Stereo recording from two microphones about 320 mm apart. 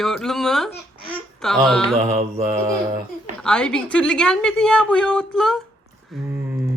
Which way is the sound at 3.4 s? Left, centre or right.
Centre.